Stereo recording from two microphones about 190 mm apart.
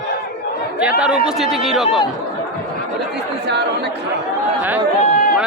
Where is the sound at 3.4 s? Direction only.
60° right (ahead or behind).